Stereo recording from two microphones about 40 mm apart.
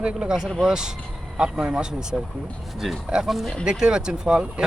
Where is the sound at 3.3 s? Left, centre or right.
Centre.